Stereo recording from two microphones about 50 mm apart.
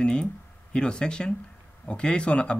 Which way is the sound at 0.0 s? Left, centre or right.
Centre.